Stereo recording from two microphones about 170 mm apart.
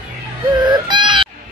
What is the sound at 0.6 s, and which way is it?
Baby cry, 25° right (ahead or behind).